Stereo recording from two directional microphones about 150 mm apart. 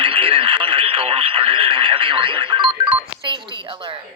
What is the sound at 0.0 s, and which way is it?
Radio, 35° right (ahead or behind).